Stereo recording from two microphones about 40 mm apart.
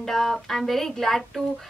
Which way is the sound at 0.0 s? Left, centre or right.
Centre.